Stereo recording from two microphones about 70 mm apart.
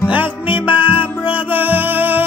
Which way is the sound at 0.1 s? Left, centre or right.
Right.